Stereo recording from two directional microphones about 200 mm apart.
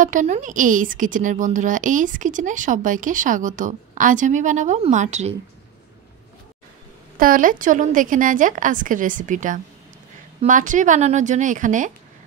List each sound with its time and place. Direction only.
0.0 s a woman's voice: 40° right (ahead or behind)
7.2 s a woman's voice: 45° right (ahead or behind)